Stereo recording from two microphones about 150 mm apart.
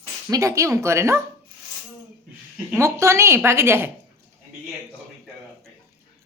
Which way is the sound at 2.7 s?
20° right (ahead or behind).